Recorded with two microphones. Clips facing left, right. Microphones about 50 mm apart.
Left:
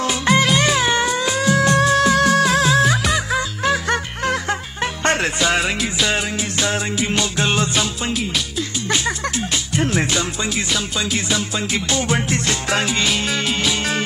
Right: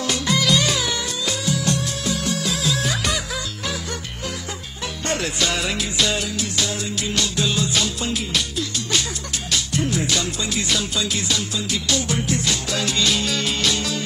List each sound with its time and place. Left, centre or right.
0.2 s music: left
1.8 s music: left
5.0 s music: left
5.8 s music: centre
6.1 s music: left
7.3 s music: left
9.0 s music: left
11.0 s music: left
12.3 s music: left